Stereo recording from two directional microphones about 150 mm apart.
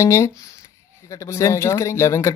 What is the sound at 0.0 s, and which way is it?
Speech, 20° left (ahead or behind).